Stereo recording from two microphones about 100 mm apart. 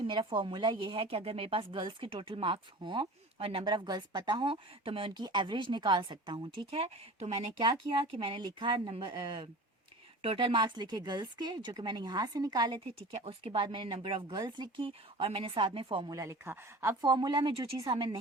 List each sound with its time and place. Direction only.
0.1 s speech: 55° right (ahead or behind)
3.3 s speech: 65° right (ahead or behind)
3.7 s speech: 45° right (ahead or behind); by 5.2 s 60° right (ahead or behind)
5.2 s speech: 50° right (ahead or behind); by 7.3 s 80° right
7.6 s speech: 55° right (ahead or behind)
10.2 s speech: 65° right (ahead or behind); by 12.8 s 45° right (ahead or behind)
13.0 s speech: 90° right
13.5 s speech: 55° right (ahead or behind)
14.3 s speech: 45° right (ahead or behind)
14.8 s speech: 65° right (ahead or behind)
16.0 s speech: 35° right (ahead or behind)
17.0 s speech: 45° right (ahead or behind)